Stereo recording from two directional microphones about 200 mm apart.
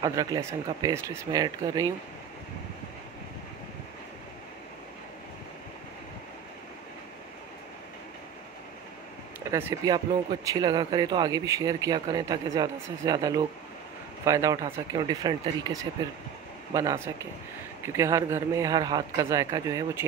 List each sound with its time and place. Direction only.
0.0 s a man's voice: 20° right (ahead or behind)
9.5 s a man's voice: 15° right (ahead or behind)